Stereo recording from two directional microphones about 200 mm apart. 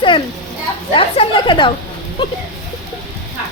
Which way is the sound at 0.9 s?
25° left (ahead or behind).